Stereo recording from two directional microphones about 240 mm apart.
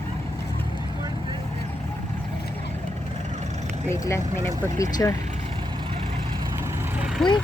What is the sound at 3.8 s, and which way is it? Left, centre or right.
Speech, centre.